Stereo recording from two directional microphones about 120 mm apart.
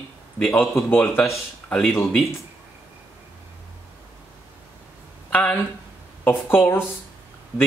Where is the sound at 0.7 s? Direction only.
20° left (ahead or behind).